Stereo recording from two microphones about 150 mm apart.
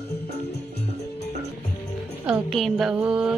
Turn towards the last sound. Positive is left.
turn(degrees=-5)  # may be behind; listen again after turning